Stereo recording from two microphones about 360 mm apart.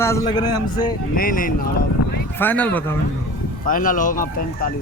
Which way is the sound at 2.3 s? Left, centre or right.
Centre.